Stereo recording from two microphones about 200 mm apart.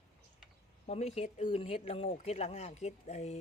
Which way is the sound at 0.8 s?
35° left (ahead or behind).